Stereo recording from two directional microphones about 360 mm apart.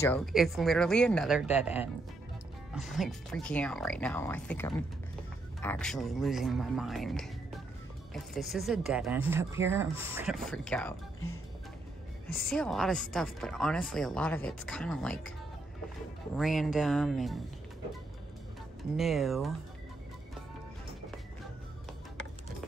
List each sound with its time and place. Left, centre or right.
0.0 s speech: centre
12.4 s speech: centre
16.3 s speech: centre
18.9 s speech: centre